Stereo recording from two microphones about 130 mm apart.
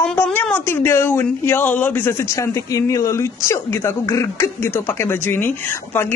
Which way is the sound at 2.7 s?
25° left (ahead or behind).